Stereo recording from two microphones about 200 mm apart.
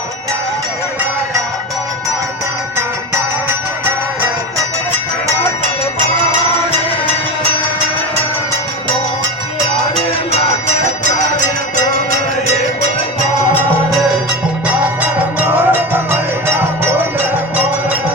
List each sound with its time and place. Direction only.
15.4 s music: 10° right (ahead or behind)